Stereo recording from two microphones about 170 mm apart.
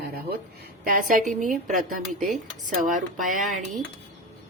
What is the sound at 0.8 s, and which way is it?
Speech, 55° right (ahead or behind).